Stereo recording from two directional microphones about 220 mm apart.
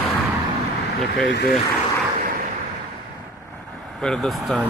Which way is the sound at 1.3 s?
50° left (ahead or behind).